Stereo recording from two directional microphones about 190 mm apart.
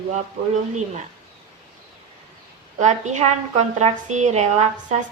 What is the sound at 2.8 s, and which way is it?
A woman's voice, 40° right (ahead or behind).